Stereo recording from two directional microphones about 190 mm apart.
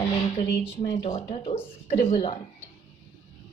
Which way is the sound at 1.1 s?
30° left (ahead or behind).